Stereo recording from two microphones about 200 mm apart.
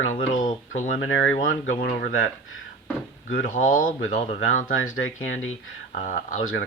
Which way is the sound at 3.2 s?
40° left (ahead or behind).